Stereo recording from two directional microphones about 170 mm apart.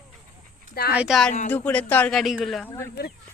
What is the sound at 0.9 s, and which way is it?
Speech, 5° right (ahead or behind).